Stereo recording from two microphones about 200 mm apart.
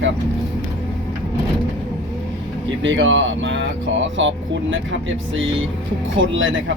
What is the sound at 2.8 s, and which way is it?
Speech, 70° right (ahead or behind).